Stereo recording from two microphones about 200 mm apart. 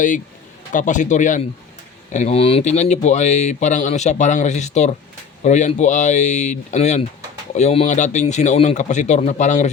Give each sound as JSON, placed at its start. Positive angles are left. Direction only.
{"t": 0.7, "sound": "speech", "side_deg": 40}